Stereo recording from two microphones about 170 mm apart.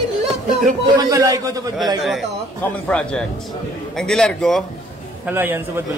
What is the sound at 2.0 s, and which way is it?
A man's voice, centre (ahead or behind).